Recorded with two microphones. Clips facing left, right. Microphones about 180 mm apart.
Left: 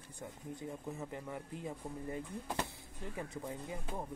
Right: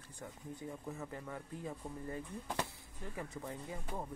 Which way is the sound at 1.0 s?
20° left (ahead or behind).